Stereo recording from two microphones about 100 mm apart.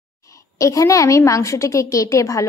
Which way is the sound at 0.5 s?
35° left (ahead or behind).